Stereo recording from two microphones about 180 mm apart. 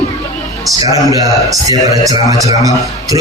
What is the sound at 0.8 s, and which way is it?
A man's voice, 20° right (ahead or behind).